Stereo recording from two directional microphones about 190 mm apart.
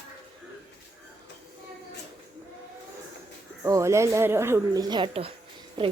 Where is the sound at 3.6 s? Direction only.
15° right (ahead or behind).